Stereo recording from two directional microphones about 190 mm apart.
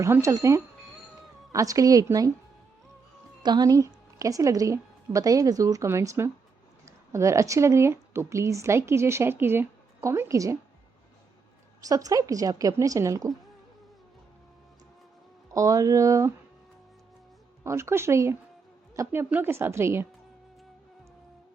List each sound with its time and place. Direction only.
0.0 s a woman's voice: 15° right (ahead or behind)
3.4 s a woman's voice: 20° right (ahead or behind)
11.9 s a woman's voice: 20° right (ahead or behind)
15.5 s a woman's voice: 15° right (ahead or behind)
17.6 s a woman's voice: 15° right (ahead or behind)